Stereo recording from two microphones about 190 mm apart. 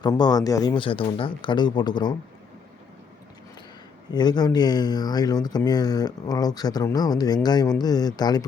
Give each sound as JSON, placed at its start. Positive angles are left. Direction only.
{"t": 0.0, "sound": "speech", "side_deg": 20}
{"t": 4.1, "sound": "speech", "side_deg": 20}